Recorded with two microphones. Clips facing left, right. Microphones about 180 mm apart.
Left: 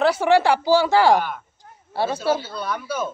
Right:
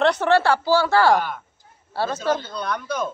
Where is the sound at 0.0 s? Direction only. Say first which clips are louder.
Left 1 dB; 10° left (ahead or behind).